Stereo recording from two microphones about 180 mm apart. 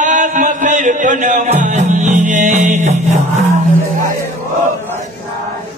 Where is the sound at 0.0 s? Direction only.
45° right (ahead or behind).